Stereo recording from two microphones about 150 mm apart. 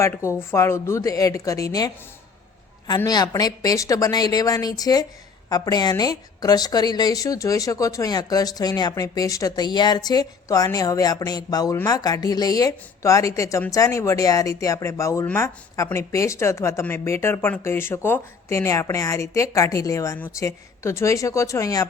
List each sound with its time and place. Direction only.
0.0 s speech: 20° left (ahead or behind)
3.0 s speech: 25° left (ahead or behind)